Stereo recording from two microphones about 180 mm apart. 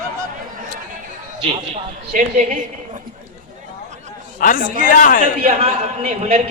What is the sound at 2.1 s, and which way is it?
Speech, 50° right (ahead or behind).